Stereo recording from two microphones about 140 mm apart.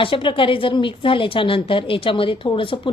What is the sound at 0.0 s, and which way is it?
A woman's voice, 40° left (ahead or behind).